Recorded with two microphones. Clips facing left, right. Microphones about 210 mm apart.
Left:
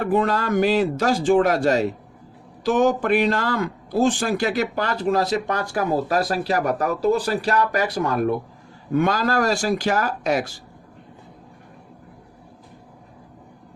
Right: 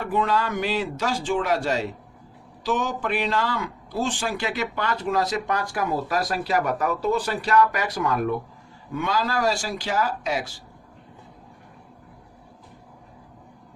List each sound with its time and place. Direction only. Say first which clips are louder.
0.0 s a man's voice: left 3 dB; 45° left (ahead or behind)